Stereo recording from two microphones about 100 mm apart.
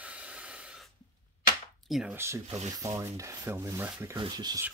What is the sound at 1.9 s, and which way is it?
Speech, 5° right (ahead or behind).